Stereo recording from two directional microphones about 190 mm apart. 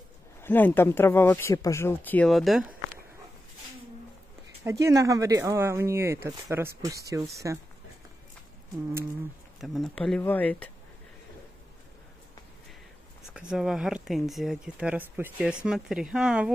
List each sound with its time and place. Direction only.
0.4 s speech: 10° left (ahead or behind)
4.6 s speech: 15° right (ahead or behind)
9.6 s speech: centre (ahead or behind)
13.3 s speech: 5° right (ahead or behind)